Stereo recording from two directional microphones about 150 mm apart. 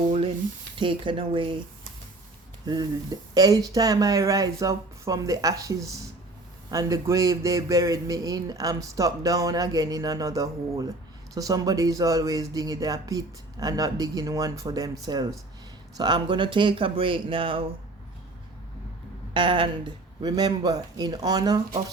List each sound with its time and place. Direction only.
0.8 s speech: 35° right (ahead or behind)
2.6 s speech: 25° right (ahead or behind)
19.3 s speech: 35° right (ahead or behind)